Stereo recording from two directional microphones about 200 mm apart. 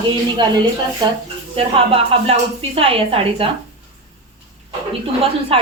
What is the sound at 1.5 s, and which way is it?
A woman's voice, 30° right (ahead or behind).